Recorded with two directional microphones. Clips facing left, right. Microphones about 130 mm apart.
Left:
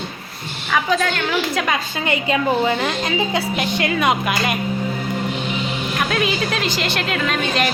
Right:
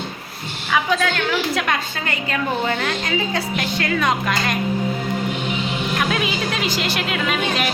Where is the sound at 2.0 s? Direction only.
15° left (ahead or behind).